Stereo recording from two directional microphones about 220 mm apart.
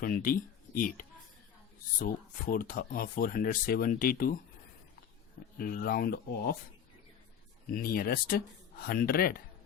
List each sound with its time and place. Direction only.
0.0 s speech: 40° left (ahead or behind)
5.5 s speech: 40° left (ahead or behind)
7.7 s speech: 40° left (ahead or behind)